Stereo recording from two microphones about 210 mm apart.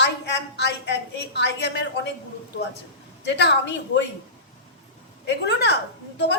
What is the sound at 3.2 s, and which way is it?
Speech, 55° left (ahead or behind).